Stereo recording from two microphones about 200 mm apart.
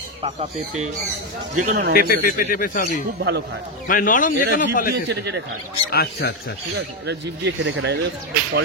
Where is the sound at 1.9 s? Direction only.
45° left (ahead or behind).